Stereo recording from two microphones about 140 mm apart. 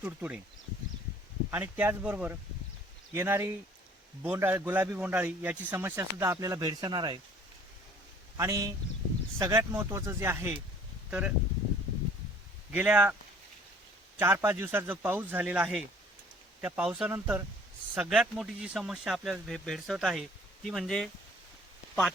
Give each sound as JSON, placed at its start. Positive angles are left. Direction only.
{"t": 0.0, "sound": "speech", "side_deg": -10}
{"t": 1.5, "sound": "speech", "side_deg": -15}
{"t": 8.4, "sound": "speech", "side_deg": -25}
{"t": 12.7, "sound": "speech", "side_deg": -10}
{"t": 14.2, "sound": "speech", "side_deg": -15}